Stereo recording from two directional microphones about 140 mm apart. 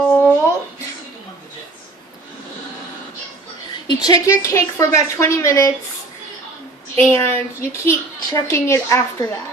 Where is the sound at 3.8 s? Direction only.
25° left (ahead or behind).